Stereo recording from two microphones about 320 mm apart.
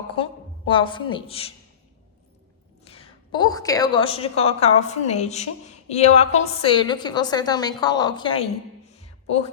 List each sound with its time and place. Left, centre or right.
0.2 s a woman's voice: centre
2.8 s a woman's voice: centre
8.9 s a sound: centre